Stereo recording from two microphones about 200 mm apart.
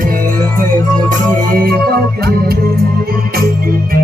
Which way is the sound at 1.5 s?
50° right (ahead or behind).